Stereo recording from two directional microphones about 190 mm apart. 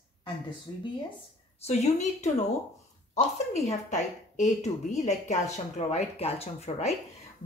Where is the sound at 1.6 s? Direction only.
35° left (ahead or behind).